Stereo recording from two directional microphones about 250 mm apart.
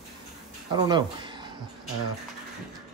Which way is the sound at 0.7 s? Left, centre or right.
Centre.